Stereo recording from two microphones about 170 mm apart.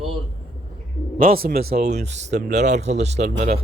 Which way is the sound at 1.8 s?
40° right (ahead or behind).